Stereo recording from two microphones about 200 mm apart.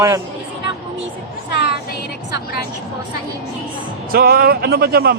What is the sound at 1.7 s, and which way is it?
Music, 55° left (ahead or behind).